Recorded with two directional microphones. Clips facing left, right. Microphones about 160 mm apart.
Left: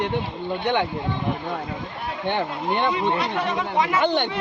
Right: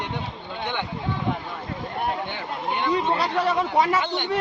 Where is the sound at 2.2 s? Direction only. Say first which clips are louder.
Left 5 dB; 65° left (ahead or behind).